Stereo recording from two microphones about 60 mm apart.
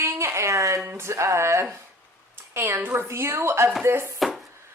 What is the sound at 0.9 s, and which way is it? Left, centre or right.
Speech, right.